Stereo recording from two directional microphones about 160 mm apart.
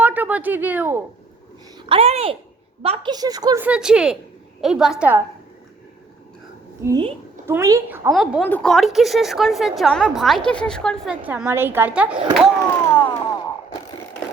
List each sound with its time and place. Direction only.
0.0 s speech: 10° right (ahead or behind)
1.9 s speech: 35° right (ahead or behind)
3.1 s speech: 25° right (ahead or behind)
3.6 s a woman's voice: 5° right (ahead or behind)
7.4 s speech: 15° right (ahead or behind)
8.1 s a woman's voice: centre (ahead or behind)
8.4 s a sound: 10° left (ahead or behind)
8.7 s a woman's voice: centre (ahead or behind)
11.1 s speech: 10° right (ahead or behind)
12.8 s a sound: 15° left (ahead or behind)